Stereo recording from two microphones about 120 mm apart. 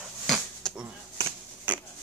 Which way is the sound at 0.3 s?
Centre (ahead or behind).